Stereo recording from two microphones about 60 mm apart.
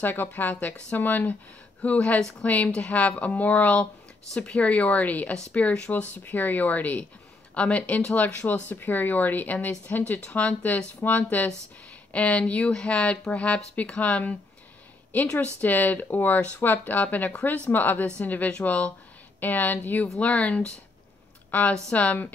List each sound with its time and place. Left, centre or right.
0.0 s speech: left; by 2.3 s centre
2.4 s speech: left
15.3 s speech: left